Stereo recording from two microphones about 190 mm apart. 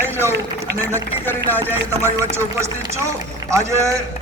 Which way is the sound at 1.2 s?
10° left (ahead or behind).